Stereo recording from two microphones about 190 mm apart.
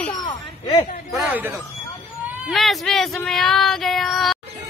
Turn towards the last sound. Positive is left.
turn(degrees=0)  # may be behind; listen again after turning